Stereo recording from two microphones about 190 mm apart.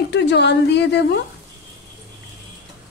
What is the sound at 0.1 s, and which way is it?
A woman's voice, 65° left (ahead or behind).